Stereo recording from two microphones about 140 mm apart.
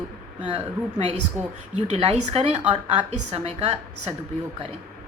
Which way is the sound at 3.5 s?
45° right (ahead or behind).